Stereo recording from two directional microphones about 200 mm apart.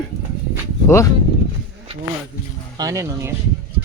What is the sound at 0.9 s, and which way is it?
Speech, 15° left (ahead or behind).